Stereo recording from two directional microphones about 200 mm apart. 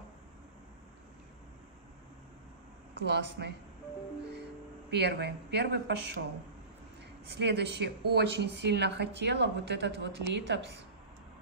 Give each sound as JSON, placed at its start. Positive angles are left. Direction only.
{"t": 2.9, "sound": "speech", "side_deg": -60}
{"t": 4.9, "sound": "a woman's voice", "side_deg": -55}
{"t": 7.2, "sound": "a woman's voice", "side_deg": -55}